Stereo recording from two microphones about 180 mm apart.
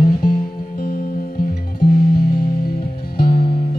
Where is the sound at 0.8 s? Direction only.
55° left (ahead or behind).